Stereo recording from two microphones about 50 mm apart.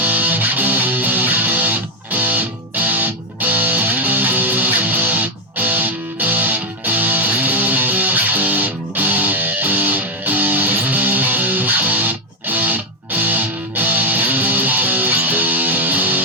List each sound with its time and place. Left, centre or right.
0.0 s music: right